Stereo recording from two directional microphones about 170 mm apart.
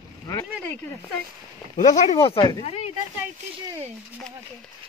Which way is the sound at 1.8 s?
45° left (ahead or behind).